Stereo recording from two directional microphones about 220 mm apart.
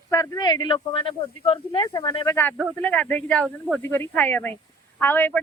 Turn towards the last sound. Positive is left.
turn(degrees=10)  # may be behind; listen again after turning